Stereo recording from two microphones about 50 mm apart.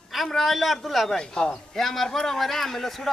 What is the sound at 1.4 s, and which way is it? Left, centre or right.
A man's voice, centre.